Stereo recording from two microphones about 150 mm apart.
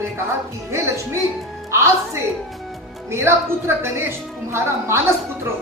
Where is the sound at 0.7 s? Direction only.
20° right (ahead or behind).